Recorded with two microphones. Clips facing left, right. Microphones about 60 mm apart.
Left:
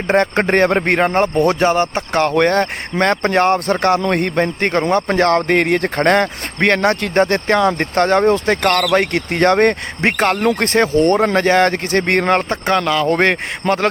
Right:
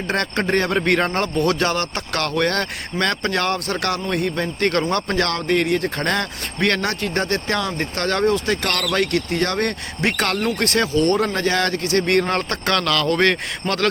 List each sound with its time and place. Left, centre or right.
0.3 s speech: left
4.1 s speech: left
4.9 s speech: left
5.1 s speech: left
10.4 s speech: left
10.7 s speech: left
12.5 s speech: centre
13.1 s speech: left